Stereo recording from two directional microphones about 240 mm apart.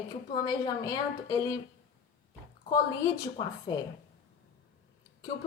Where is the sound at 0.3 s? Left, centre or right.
Centre.